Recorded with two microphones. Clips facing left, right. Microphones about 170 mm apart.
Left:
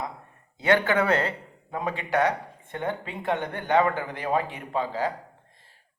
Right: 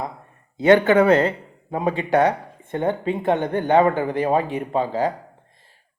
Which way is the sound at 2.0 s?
35° right (ahead or behind).